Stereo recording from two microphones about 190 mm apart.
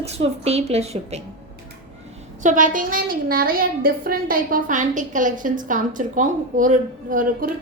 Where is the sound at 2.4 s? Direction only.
45° right (ahead or behind).